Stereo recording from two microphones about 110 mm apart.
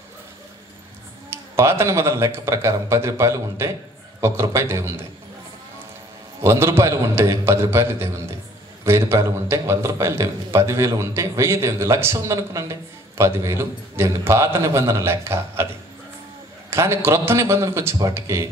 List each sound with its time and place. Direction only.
1.3 s a man's voice: 25° right (ahead or behind)
6.4 s a man's voice: 25° right (ahead or behind)
16.7 s a man's voice: 25° right (ahead or behind)